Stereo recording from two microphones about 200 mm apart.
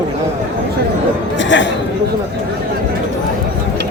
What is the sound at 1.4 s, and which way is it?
Speech, 65° left (ahead or behind).